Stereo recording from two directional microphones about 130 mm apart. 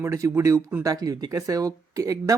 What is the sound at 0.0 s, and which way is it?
Speech, 20° right (ahead or behind).